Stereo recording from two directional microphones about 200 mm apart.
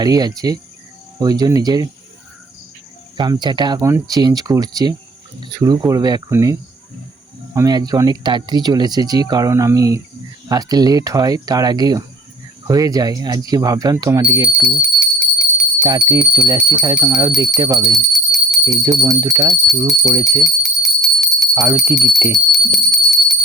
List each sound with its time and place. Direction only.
0.0 s speech: 20° right (ahead or behind)
3.2 s speech: 20° right (ahead or behind)
14.8 s jingle bell: 5° right (ahead or behind)
15.8 s speech: 20° right (ahead or behind)
16.1 s speech: 10° right (ahead or behind)
18.1 s jingle bell: centre (ahead or behind)
18.6 s speech: 15° right (ahead or behind)
20.4 s bell: centre (ahead or behind)
21.5 s speech: 15° right (ahead or behind)
22.5 s music: centre (ahead or behind)